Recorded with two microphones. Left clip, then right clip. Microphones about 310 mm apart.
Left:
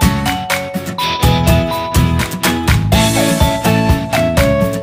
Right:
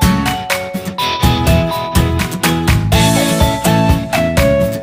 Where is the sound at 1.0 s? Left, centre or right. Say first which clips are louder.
Even; centre.